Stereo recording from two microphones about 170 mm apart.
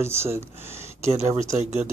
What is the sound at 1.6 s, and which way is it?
Speech, 40° right (ahead or behind).